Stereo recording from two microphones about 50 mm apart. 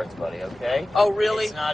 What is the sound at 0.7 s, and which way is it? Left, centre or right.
Speech, centre.